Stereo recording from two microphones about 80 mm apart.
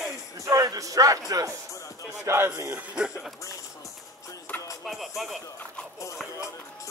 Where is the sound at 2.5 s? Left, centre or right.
Right.